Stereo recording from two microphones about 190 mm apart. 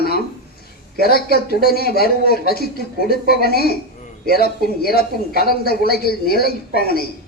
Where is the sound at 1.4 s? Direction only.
55° left (ahead or behind).